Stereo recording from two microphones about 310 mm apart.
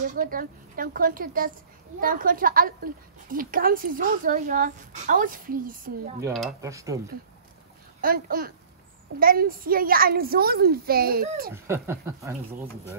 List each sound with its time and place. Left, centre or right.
0.0 s a woman's voice: right
6.6 s speech: centre
8.0 s a woman's voice: right
11.5 s speech: centre